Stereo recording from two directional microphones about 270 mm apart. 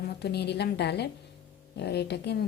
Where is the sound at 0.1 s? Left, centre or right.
Left.